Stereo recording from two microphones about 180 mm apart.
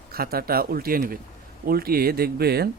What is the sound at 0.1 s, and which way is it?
A man's voice, 55° right (ahead or behind).